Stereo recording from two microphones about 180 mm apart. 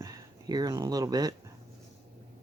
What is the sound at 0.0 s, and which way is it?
Speech, 20° right (ahead or behind).